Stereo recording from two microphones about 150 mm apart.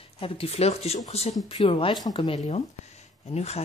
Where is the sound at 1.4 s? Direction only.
30° left (ahead or behind).